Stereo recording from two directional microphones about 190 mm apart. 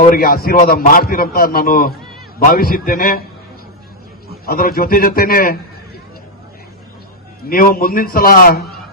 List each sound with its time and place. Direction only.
0.0 s a man's voice: 50° left (ahead or behind)
4.4 s a man's voice: 50° left (ahead or behind)
7.4 s a man's voice: 50° left (ahead or behind)